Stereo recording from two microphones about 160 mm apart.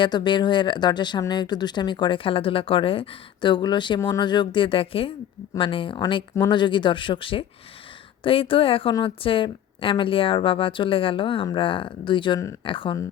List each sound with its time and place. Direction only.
0.0 s a woman's voice: 30° left (ahead or behind)